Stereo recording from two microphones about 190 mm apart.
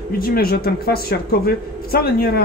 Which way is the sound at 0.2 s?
50° left (ahead or behind).